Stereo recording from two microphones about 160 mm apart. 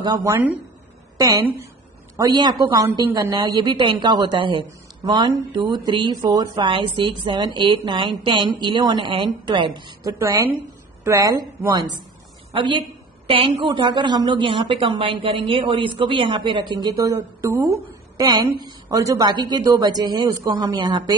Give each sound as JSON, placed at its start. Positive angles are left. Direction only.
{"t": 0.0, "sound": "a woman's voice", "side_deg": -20}
{"t": 13.3, "sound": "a woman's voice", "side_deg": -30}